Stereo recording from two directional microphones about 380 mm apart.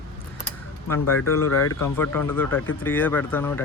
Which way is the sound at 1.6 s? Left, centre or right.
Centre.